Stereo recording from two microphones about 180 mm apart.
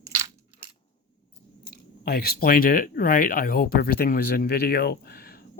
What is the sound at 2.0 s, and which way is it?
Speech, 60° left (ahead or behind).